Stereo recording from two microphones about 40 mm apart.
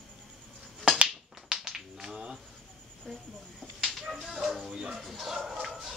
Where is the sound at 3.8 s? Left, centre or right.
Centre.